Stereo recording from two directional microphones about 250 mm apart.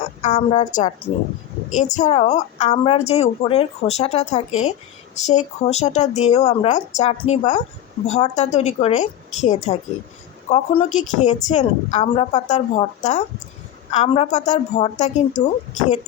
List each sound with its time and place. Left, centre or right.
0.2 s a woman's voice: left